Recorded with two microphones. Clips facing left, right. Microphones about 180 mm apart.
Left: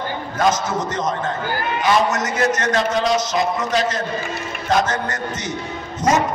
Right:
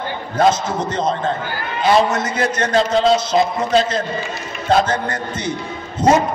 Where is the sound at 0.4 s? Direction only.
30° right (ahead or behind).